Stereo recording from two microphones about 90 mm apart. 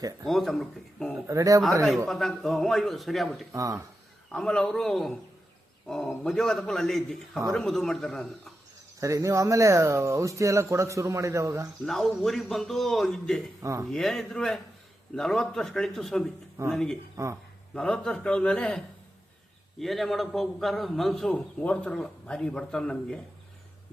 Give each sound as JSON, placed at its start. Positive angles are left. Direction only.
{"t": 0.3, "sound": "a man's voice", "side_deg": 0}
{"t": 1.3, "sound": "speech", "side_deg": -40}
{"t": 2.0, "sound": "a man's voice", "side_deg": 0}
{"t": 3.5, "sound": "speech", "side_deg": -35}
{"t": 4.3, "sound": "a man's voice", "side_deg": 10}
{"t": 9.0, "sound": "speech", "side_deg": -35}
{"t": 11.9, "sound": "a man's voice", "side_deg": 5}
{"t": 13.6, "sound": "speech", "side_deg": -35}
{"t": 13.8, "sound": "a man's voice", "side_deg": 5}
{"t": 19.8, "sound": "a man's voice", "side_deg": 0}